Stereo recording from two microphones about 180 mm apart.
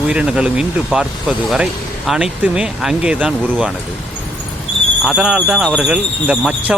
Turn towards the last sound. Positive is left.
turn(degrees=-5)  # may be behind; listen again after turning